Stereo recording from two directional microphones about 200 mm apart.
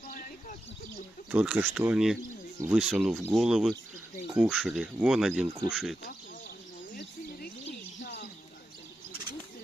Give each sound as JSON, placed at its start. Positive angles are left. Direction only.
{"t": 0.1, "sound": "bird", "side_deg": 45}
{"t": 1.3, "sound": "speech", "side_deg": -5}
{"t": 6.9, "sound": "a sound", "side_deg": 50}